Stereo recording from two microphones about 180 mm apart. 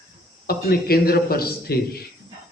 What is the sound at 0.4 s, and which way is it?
A man's voice, 55° left (ahead or behind).